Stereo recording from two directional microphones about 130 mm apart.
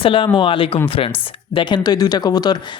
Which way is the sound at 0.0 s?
40° left (ahead or behind).